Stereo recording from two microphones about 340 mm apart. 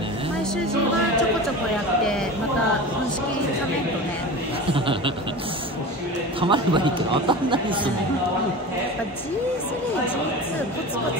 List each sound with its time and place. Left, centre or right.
4.7 s speech: centre
6.4 s speech: centre